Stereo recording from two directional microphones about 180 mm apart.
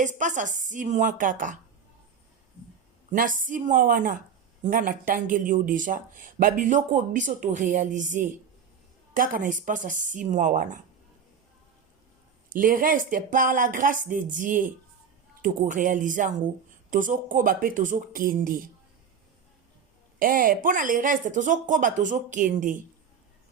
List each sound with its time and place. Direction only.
0.0 s speech: 45° right (ahead or behind)
3.1 s speech: 50° right (ahead or behind)
12.5 s speech: 50° right (ahead or behind)
20.1 s speech: 50° right (ahead or behind)